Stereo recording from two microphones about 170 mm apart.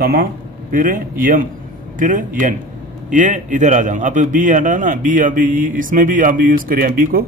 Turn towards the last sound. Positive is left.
turn(degrees=-55)  # may be behind; listen again after turning